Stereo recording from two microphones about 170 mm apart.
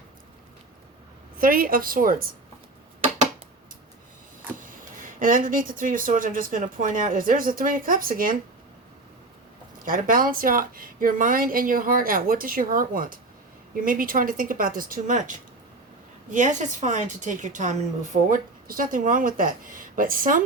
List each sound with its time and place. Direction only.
1.4 s speech: 55° right (ahead or behind)
4.5 s speech: 50° right (ahead or behind)
9.7 s a woman's voice: 55° right (ahead or behind)